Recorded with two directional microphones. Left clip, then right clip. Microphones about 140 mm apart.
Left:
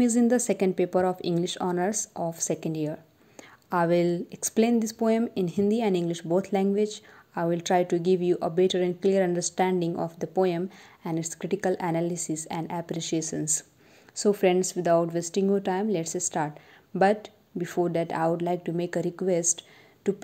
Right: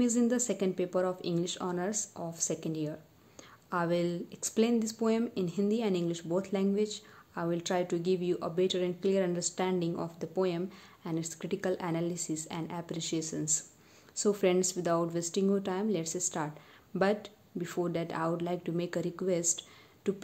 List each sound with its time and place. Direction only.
0.0 s a woman's voice: 35° left (ahead or behind)